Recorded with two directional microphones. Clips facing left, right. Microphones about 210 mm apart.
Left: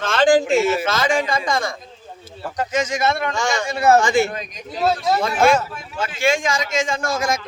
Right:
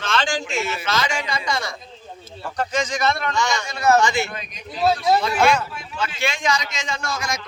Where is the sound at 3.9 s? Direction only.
50° left (ahead or behind).